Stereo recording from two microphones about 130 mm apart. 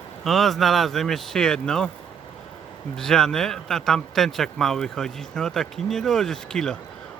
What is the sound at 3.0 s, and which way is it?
Speech, 5° left (ahead or behind).